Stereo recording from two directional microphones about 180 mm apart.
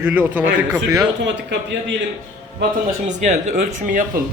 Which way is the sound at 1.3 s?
80° right.